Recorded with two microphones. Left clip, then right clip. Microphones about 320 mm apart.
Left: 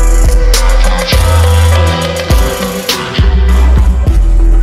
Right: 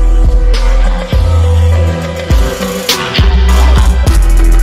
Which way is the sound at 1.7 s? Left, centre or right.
Left.